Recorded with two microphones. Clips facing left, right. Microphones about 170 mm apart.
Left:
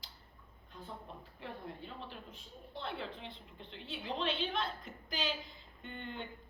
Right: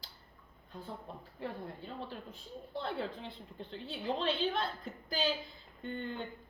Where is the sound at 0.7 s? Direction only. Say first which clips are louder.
Right 3 dB; 40° right (ahead or behind).